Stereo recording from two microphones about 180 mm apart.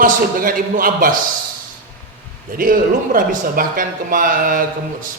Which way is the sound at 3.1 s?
50° right (ahead or behind).